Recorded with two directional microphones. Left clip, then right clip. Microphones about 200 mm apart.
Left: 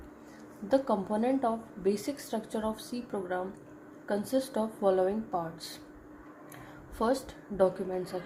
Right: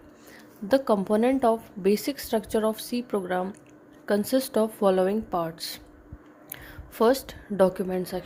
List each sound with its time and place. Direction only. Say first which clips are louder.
0.7 s a woman's voice: right 6 dB; 45° right (ahead or behind)
7.0 s a woman's voice: right 8 dB; 45° right (ahead or behind)